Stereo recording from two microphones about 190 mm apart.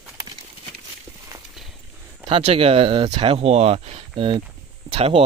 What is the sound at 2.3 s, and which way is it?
Speech, 30° right (ahead or behind).